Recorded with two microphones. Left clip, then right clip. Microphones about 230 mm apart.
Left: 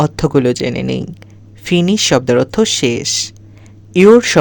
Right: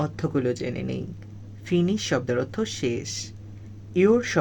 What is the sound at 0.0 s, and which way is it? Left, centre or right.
Speech, left.